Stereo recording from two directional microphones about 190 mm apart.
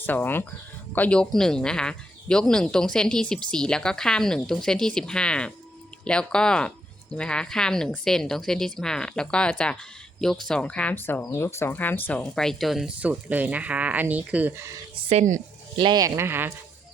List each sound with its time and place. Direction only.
0.0 s speech: 10° left (ahead or behind); by 14.8 s 15° right (ahead or behind)
14.9 s speech: 35° right (ahead or behind)
15.8 s speech: 20° right (ahead or behind)